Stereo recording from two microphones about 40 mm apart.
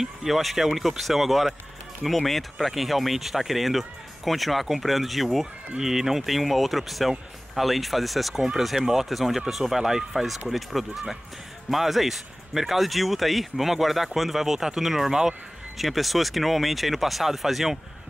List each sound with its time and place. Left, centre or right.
0.0 s speech: centre